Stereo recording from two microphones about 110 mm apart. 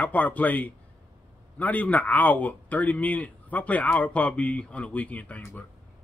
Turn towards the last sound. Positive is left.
turn(degrees=15)  # may be behind; listen again after turning